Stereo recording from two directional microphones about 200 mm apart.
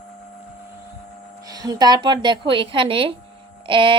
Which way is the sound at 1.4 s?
20° right (ahead or behind).